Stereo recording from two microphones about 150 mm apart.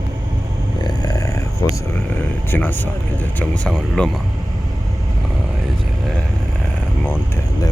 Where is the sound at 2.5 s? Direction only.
10° left (ahead or behind).